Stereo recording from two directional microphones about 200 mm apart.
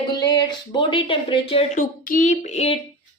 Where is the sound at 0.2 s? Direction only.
20° left (ahead or behind).